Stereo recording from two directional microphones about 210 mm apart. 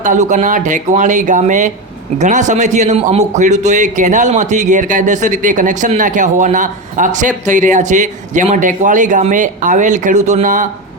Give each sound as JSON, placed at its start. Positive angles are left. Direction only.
{"t": 0.0, "sound": "a man's voice", "side_deg": -35}